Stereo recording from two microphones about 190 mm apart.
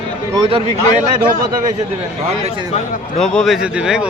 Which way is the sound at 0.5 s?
35° right (ahead or behind).